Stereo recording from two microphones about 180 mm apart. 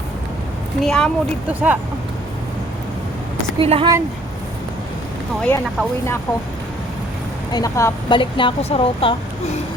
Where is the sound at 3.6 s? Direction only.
30° right (ahead or behind).